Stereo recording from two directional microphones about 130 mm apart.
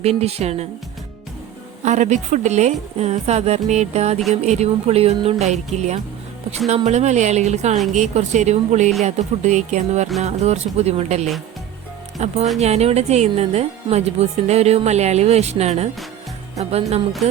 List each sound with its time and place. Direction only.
0.0 s speech: 55° right (ahead or behind)
1.8 s speech: 65° right (ahead or behind)